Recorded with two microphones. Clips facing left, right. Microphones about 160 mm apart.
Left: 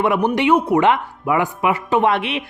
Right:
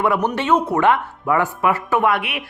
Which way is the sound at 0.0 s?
20° left (ahead or behind).